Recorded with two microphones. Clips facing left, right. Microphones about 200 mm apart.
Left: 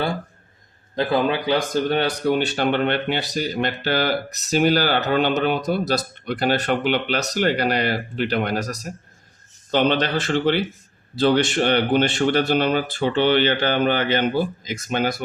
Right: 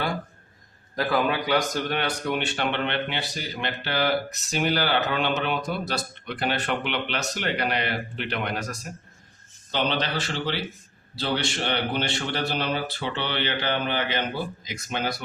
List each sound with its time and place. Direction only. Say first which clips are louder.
0.9 s speech: left 4 dB; 25° left (ahead or behind)
9.7 s speech: left 7 dB; 50° left (ahead or behind)